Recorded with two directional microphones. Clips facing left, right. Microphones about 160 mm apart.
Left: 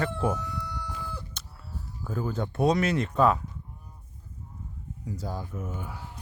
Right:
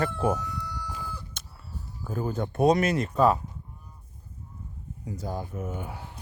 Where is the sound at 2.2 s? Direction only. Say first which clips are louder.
Right 2 dB; 50° right (ahead or behind).